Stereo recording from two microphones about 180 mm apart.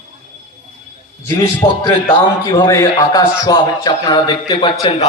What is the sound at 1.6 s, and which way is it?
Speech, 25° left (ahead or behind).